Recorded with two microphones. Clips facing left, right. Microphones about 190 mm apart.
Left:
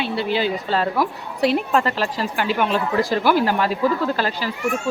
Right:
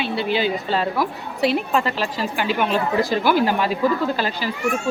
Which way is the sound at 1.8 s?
40° left (ahead or behind).